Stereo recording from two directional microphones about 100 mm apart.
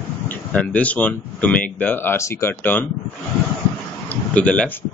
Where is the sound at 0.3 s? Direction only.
15° left (ahead or behind).